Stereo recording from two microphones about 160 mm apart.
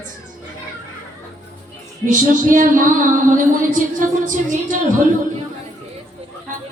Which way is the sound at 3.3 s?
55° right (ahead or behind).